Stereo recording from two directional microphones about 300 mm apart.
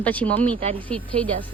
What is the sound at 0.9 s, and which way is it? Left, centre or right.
Speech, centre.